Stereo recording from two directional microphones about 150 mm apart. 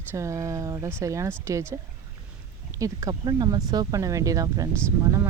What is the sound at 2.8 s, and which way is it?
Speech, 25° right (ahead or behind).